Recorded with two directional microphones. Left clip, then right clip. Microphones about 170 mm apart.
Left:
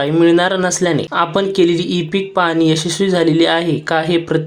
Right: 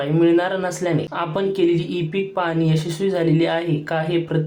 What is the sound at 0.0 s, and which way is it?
Speech, 30° left (ahead or behind).